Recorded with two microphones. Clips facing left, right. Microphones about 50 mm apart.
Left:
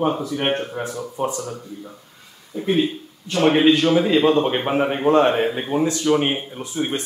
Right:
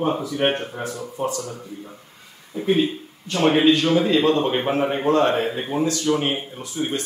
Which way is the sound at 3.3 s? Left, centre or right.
Centre.